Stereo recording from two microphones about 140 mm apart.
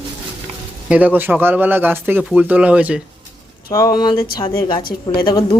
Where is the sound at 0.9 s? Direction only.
10° right (ahead or behind).